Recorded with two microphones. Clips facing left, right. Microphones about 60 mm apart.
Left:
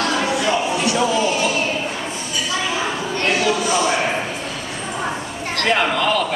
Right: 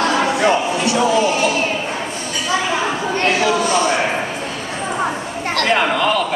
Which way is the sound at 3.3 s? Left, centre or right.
Right.